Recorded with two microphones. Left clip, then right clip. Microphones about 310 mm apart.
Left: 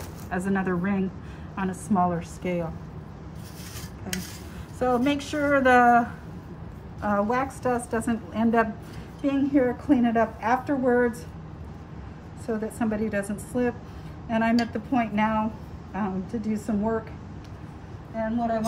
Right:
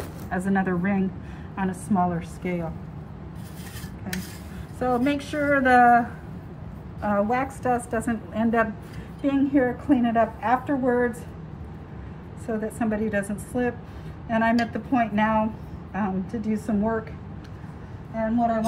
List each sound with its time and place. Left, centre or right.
0.3 s a woman's voice: centre
4.1 s a woman's voice: centre
12.4 s a woman's voice: centre
18.1 s a woman's voice: centre